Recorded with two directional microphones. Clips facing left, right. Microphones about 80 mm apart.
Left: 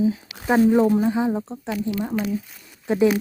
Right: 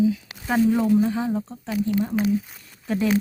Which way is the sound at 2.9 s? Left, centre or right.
Centre.